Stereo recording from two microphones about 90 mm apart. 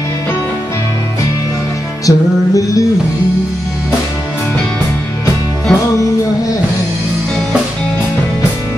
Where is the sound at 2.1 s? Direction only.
40° left (ahead or behind).